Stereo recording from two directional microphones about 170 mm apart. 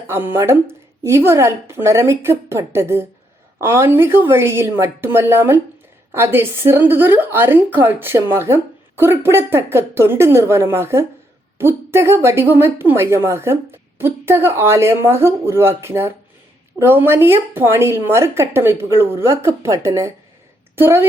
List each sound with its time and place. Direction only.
0.1 s a woman's voice: 15° right (ahead or behind)